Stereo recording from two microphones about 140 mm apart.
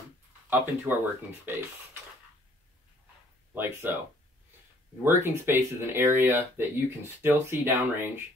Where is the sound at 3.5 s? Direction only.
15° right (ahead or behind).